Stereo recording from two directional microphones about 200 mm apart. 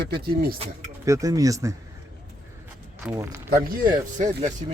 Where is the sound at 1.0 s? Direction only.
15° right (ahead or behind).